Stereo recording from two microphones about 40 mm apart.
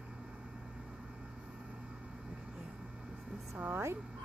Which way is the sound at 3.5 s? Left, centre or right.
Right.